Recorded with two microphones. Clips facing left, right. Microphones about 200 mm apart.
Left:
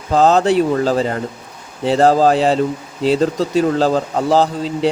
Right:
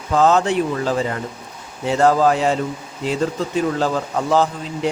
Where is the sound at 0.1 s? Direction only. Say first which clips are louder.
Left 3 dB; 35° left (ahead or behind).